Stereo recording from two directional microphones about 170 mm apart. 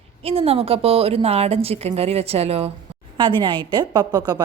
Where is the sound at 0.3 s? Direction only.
35° right (ahead or behind).